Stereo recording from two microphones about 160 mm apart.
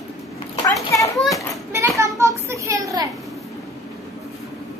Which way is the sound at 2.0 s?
20° right (ahead or behind).